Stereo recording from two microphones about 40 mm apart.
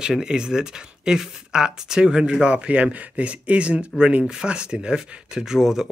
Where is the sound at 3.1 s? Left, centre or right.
Right.